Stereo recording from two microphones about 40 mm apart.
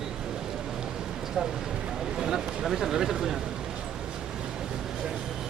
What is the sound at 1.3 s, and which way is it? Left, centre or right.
Speech, centre.